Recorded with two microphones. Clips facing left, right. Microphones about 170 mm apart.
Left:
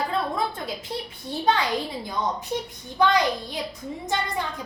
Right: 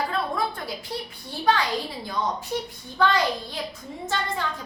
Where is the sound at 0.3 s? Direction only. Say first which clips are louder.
Left 1 dB; 20° left (ahead or behind).